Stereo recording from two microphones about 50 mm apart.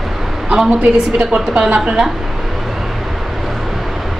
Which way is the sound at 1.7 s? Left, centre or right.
Right.